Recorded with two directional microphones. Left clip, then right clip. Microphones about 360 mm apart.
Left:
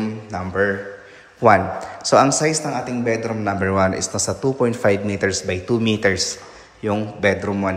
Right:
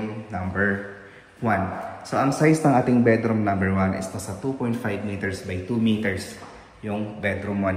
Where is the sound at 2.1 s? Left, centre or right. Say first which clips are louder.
Left 7 dB; centre.